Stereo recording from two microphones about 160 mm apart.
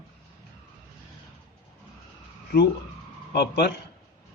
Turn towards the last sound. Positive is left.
turn(degrees=90)